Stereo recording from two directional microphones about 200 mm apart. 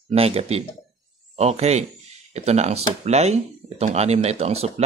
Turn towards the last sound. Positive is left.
turn(degrees=-30)  # may be behind; listen again after turning